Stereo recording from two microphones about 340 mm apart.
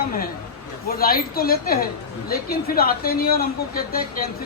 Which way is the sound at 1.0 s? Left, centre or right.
Left.